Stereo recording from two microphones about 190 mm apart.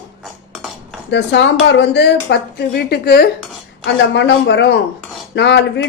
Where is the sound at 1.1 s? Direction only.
70° left (ahead or behind).